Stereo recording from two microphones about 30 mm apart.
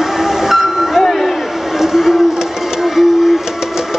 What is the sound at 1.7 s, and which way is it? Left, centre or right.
Vehicle, centre.